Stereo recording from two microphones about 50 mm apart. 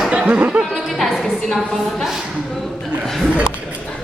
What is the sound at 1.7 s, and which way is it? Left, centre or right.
Speech, centre.